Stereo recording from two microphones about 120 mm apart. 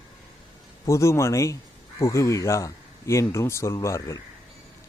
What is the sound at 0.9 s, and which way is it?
A man's voice, 25° left (ahead or behind).